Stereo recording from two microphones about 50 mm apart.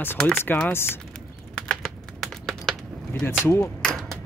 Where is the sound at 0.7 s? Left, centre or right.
Left.